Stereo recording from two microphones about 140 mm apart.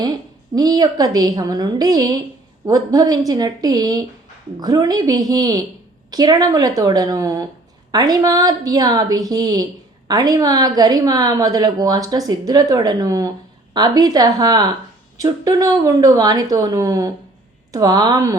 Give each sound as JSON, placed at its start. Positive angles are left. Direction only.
{"t": 0.5, "sound": "a woman's voice", "side_deg": -30}